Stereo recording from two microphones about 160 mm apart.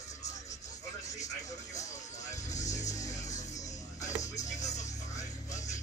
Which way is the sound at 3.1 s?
45° left (ahead or behind).